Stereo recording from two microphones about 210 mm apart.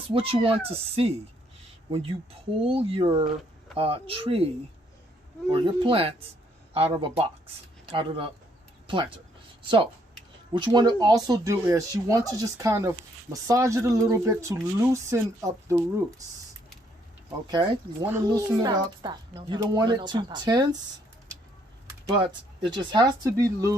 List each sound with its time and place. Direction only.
0.1 s speech: 25° right (ahead or behind)
2.6 s speech: 25° right (ahead or behind)
5.5 s speech: 25° right (ahead or behind)
17.4 s speech: 20° right (ahead or behind)
22.1 s speech: 20° right (ahead or behind)